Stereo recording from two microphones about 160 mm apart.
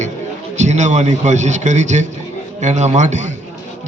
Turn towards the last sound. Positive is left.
turn(degrees=-50)  # may be behind; listen again after turning